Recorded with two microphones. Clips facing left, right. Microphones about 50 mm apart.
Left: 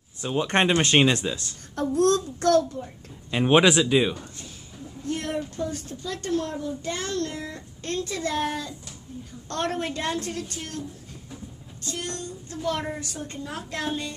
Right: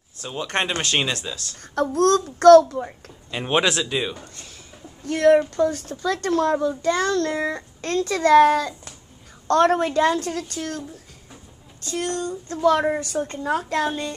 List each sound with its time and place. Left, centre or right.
0.2 s speech: centre
1.8 s a child's voice: right
3.3 s speech: centre
5.0 s a child's voice: right
11.8 s a child's voice: right
12.6 s a woman's voice: right